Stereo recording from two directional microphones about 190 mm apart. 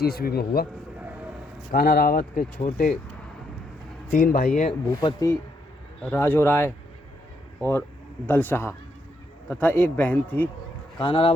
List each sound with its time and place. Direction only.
0.0 s speech: 55° left (ahead or behind)
1.7 s speech: 50° left (ahead or behind)
4.1 s speech: 45° left (ahead or behind)
4.9 s a man's voice: 15° left (ahead or behind)
11.0 s speech: 25° left (ahead or behind)